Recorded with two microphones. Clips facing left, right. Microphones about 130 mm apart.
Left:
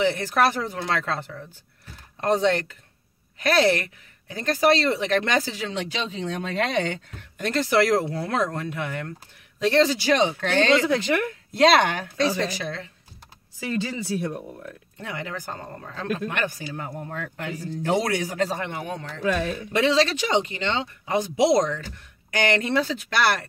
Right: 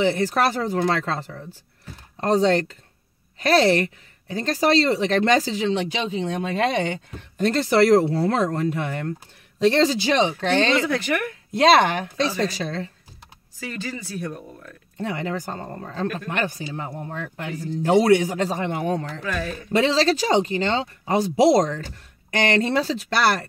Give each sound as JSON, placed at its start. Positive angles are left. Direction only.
{"t": 0.0, "sound": "speech", "side_deg": -30}
{"t": 7.3, "sound": "speech", "side_deg": -35}
{"t": 10.9, "sound": "speech", "side_deg": 20}
{"t": 11.5, "sound": "speech", "side_deg": -30}
{"t": 13.7, "sound": "speech", "side_deg": 20}
{"t": 15.0, "sound": "speech", "side_deg": -35}
{"t": 18.8, "sound": "speech", "side_deg": -40}